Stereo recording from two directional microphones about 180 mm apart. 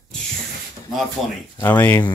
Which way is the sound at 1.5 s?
10° left (ahead or behind).